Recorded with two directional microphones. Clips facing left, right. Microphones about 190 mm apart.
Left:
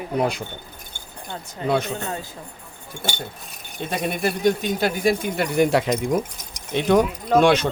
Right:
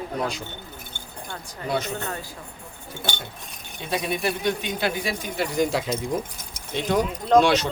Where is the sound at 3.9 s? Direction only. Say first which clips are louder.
Left 1 dB; 50° left (ahead or behind).